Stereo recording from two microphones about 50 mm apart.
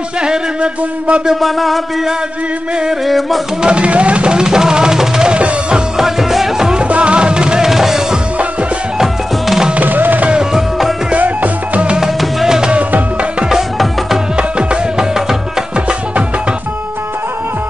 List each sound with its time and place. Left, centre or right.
0.2 s a sound: centre
1.3 s a sound: centre
3.1 s a sound: centre
3.6 s speech: right
5.3 s music: right
5.9 s music: centre
6.8 s music: right
9.8 s music: right
10.3 s music: centre
11.1 s music: right
12.0 s music: centre
12.7 s music: right
13.5 s music: centre
14.3 s music: centre